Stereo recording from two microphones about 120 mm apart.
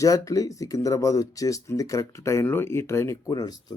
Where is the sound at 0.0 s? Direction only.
30° left (ahead or behind).